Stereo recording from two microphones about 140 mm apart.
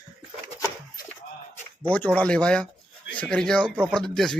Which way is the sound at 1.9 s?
10° left (ahead or behind).